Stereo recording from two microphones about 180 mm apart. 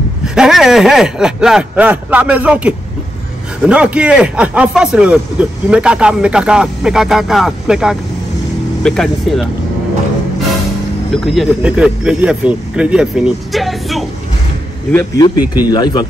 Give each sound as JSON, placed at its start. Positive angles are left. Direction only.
{"t": 0.3, "sound": "a man's voice", "side_deg": -5}
{"t": 11.1, "sound": "a man's voice", "side_deg": 0}
{"t": 14.9, "sound": "speech", "side_deg": 10}
{"t": 15.4, "sound": "speech", "side_deg": -10}
{"t": 15.7, "sound": "speech", "side_deg": 25}